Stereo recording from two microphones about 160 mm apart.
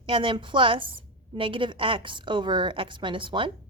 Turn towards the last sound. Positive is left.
turn(degrees=-30)  # may be behind; listen again after turning